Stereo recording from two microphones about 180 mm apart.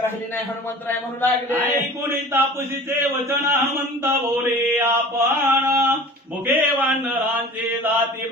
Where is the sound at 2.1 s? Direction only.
15° right (ahead or behind).